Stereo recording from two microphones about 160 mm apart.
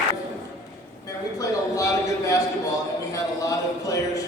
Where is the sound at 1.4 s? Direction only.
20° left (ahead or behind).